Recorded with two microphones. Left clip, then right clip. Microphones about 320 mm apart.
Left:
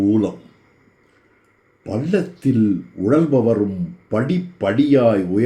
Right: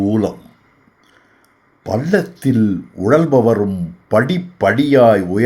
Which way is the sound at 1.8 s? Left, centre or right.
Right.